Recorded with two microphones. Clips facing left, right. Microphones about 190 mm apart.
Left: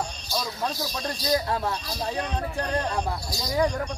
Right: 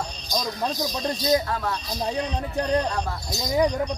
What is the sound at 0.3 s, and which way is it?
Speech, 15° right (ahead or behind).